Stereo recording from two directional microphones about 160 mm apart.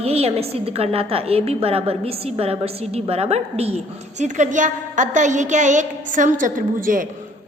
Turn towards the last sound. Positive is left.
turn(degrees=-60)  # may be behind; listen again after turning